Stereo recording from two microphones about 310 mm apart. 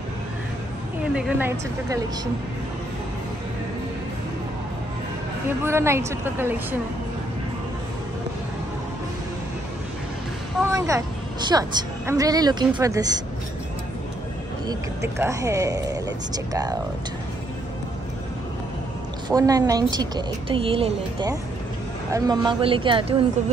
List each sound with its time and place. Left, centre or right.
1.1 s speech: centre
5.6 s a woman's voice: centre
10.6 s a woman's voice: centre
14.7 s a woman's voice: centre
19.2 s a woman's voice: centre